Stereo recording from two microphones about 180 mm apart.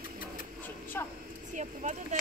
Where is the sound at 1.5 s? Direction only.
40° right (ahead or behind).